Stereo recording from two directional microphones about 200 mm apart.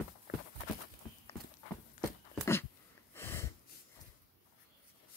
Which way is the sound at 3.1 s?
10° left (ahead or behind).